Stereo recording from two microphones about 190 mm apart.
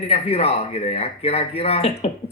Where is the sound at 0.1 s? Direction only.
30° left (ahead or behind).